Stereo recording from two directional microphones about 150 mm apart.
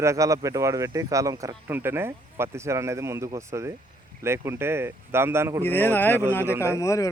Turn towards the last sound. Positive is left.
turn(degrees=20)  # may be behind; listen again after turning